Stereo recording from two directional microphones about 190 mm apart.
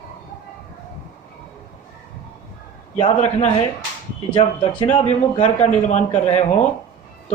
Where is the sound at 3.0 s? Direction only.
35° left (ahead or behind).